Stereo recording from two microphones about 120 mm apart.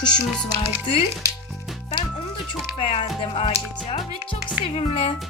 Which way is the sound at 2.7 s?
50° left (ahead or behind).